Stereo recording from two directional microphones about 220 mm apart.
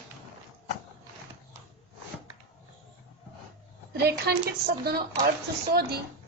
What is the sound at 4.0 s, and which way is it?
A woman's voice, 45° right (ahead or behind).